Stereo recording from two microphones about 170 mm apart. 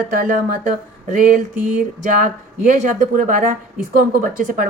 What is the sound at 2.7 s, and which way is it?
A woman's voice, 50° right (ahead or behind).